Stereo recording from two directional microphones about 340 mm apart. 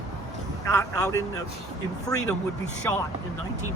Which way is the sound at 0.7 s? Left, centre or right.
Centre.